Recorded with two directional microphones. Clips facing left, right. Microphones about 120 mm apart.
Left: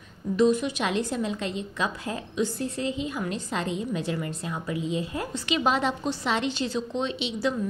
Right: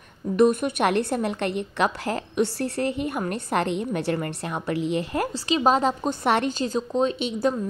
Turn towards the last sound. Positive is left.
turn(degrees=-50)  # may be behind; listen again after turning